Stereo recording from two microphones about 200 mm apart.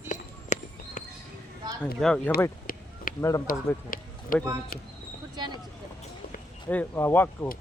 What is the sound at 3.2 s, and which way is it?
Speech, 15° left (ahead or behind).